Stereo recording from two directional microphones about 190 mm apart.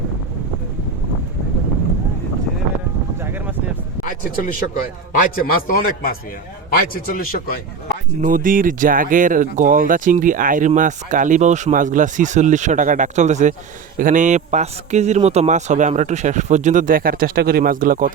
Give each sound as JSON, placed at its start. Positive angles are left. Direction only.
{"t": 5.1, "sound": "a man's voice", "side_deg": 45}
{"t": 8.2, "sound": "a man's voice", "side_deg": -45}